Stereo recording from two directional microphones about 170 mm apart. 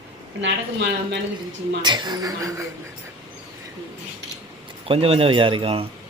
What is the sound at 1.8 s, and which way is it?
Speech, 25° right (ahead or behind).